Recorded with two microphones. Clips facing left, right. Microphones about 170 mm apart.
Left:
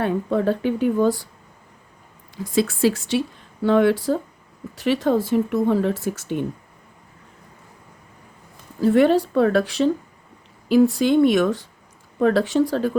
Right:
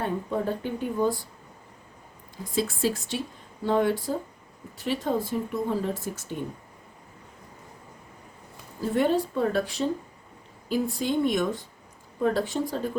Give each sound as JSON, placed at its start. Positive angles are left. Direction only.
{"t": 0.0, "sound": "a woman's voice", "side_deg": 90}
{"t": 2.3, "sound": "a woman's voice", "side_deg": 80}
{"t": 8.8, "sound": "a woman's voice", "side_deg": 80}